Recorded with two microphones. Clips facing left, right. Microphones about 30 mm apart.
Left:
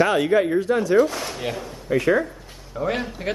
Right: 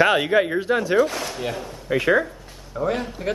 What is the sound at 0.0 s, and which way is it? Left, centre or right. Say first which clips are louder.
Speech: right 1 dB; right.